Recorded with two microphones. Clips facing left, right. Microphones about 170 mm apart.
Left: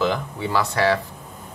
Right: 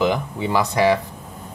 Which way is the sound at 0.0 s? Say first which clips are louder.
Right 3 dB; 15° right (ahead or behind).